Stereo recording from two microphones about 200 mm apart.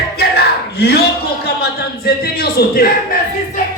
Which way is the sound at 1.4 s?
50° left (ahead or behind).